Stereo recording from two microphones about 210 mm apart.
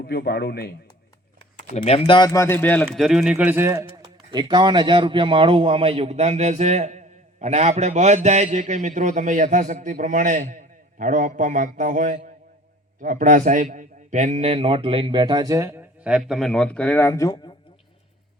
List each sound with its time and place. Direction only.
0.0 s speech: 50° left (ahead or behind)
1.7 s a man's voice: 30° left (ahead or behind)